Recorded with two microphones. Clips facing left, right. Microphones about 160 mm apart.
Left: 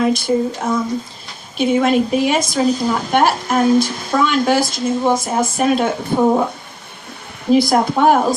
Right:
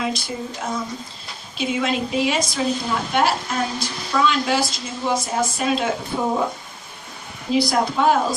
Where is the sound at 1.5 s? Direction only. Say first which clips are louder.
Left 8 dB; 55° left (ahead or behind).